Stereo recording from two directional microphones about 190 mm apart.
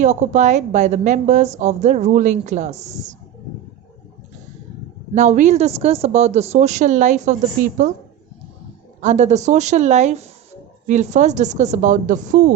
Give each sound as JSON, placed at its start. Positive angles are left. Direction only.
{"t": 0.0, "sound": "a woman's voice", "side_deg": -40}
{"t": 5.1, "sound": "a woman's voice", "side_deg": -40}